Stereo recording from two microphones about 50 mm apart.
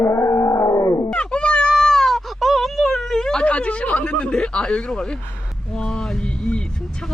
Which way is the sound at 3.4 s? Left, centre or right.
Left.